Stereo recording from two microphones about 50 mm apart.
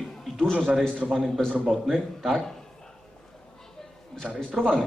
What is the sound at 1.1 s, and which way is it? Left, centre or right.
A man's voice, centre.